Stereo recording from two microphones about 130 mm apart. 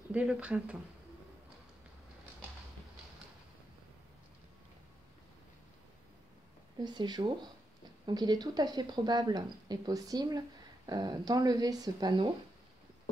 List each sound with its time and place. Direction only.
0.1 s speech: 10° right (ahead or behind)
6.8 s speech: 35° right (ahead or behind)